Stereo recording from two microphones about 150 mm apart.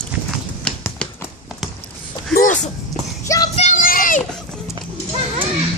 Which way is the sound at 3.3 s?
25° left (ahead or behind).